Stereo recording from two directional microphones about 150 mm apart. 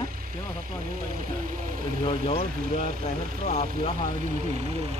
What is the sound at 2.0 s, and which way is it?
Speech, 40° left (ahead or behind).